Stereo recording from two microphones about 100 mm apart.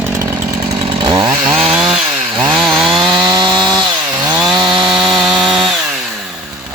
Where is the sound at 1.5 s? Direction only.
10° right (ahead or behind).